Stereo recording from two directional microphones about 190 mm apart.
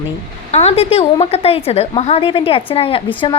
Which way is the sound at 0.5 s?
35° left (ahead or behind).